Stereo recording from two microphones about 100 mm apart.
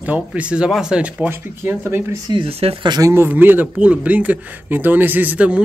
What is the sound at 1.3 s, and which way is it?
Speech, 25° right (ahead or behind).